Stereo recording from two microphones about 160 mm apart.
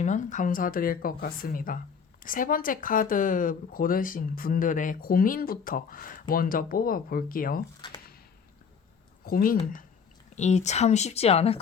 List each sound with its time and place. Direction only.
0.0 s speech: 50° left (ahead or behind)
9.2 s speech: 65° left (ahead or behind)
10.3 s speech: 45° left (ahead or behind)